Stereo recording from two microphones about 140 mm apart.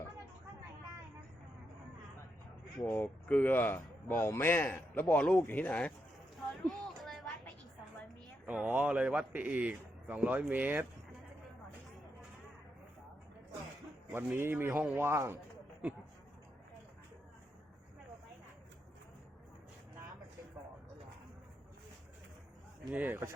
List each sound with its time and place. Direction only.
2.9 s a man's voice: 10° left (ahead or behind)
6.7 s a sound: centre (ahead or behind)
8.4 s speech: 10° right (ahead or behind)
14.1 s speech: 15° right (ahead or behind)
22.9 s speech: 10° right (ahead or behind)